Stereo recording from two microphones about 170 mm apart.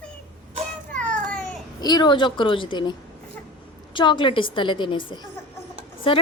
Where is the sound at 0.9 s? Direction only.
5° left (ahead or behind).